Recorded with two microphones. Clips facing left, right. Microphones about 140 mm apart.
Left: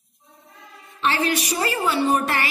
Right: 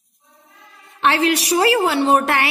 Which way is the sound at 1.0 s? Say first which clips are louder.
Right 5 dB; 65° right (ahead or behind).